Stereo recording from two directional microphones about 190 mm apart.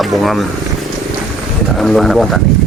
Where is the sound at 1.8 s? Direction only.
Centre (ahead or behind).